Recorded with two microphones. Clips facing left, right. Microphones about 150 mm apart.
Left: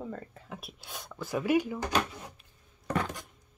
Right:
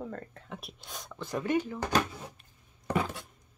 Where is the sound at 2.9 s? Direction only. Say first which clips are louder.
Right 1 dB; 10° right (ahead or behind).